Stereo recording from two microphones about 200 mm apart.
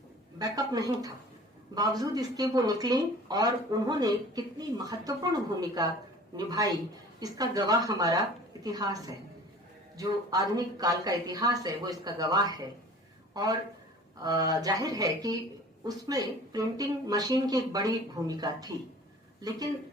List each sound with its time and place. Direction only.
0.3 s speech: 20° right (ahead or behind)